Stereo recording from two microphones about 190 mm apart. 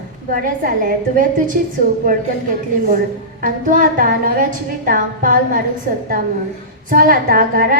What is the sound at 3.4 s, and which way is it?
A woman's voice, 45° right (ahead or behind).